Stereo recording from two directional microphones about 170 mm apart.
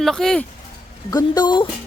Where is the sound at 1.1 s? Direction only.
25° left (ahead or behind).